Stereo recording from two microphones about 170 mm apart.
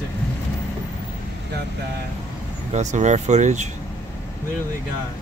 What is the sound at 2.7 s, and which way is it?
Speech, 45° right (ahead or behind).